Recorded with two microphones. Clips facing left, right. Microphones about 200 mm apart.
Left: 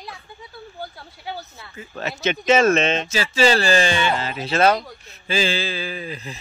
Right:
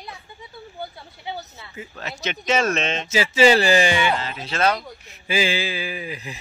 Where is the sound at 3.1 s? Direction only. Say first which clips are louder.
Right 5 dB; 20° right (ahead or behind).